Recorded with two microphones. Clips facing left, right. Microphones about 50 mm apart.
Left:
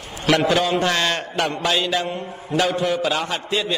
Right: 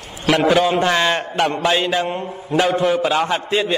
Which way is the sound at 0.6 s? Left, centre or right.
Right.